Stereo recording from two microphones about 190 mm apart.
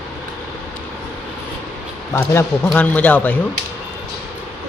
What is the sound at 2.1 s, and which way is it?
A man's voice, 10° left (ahead or behind).